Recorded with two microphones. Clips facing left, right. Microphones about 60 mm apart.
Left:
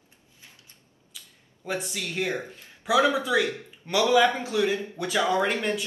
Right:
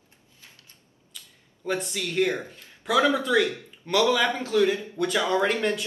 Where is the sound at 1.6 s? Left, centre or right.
Centre.